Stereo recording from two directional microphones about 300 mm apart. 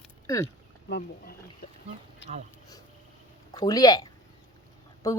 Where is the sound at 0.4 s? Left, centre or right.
Left.